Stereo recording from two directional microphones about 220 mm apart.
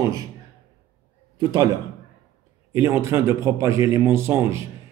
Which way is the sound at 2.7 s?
10° right (ahead or behind).